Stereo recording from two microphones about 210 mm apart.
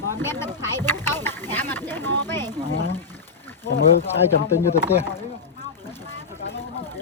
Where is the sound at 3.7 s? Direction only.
50° left (ahead or behind).